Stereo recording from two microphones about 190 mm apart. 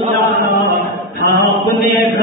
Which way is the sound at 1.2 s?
70° right (ahead or behind).